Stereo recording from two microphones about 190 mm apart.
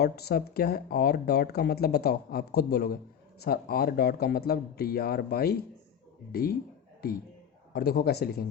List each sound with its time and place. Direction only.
0.0 s speech: 55° left (ahead or behind)
7.7 s speech: 55° left (ahead or behind)